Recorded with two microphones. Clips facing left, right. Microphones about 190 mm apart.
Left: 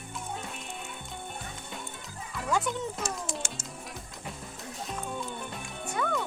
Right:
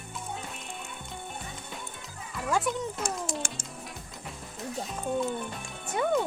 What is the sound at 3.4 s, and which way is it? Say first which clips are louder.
Music: right 2 dB; 55° right (ahead or behind).